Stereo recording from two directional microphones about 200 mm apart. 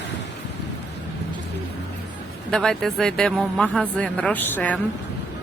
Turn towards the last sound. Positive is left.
turn(degrees=10)  # may be behind; listen again after turning